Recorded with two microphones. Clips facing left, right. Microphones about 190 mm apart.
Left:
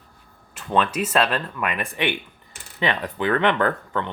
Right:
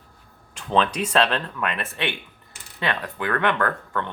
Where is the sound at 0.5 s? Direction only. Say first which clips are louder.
Even; 5° left (ahead or behind).